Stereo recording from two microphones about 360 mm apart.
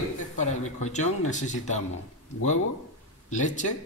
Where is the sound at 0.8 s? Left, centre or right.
Centre.